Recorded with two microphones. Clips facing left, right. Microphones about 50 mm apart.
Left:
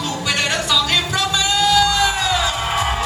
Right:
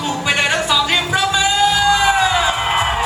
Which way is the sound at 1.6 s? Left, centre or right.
Centre.